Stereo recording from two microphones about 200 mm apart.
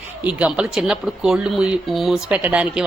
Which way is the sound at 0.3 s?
5° right (ahead or behind).